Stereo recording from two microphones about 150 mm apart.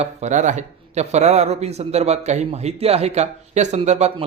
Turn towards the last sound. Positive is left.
turn(degrees=-50)  # may be behind; listen again after turning